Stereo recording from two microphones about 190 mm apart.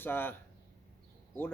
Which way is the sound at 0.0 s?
10° left (ahead or behind).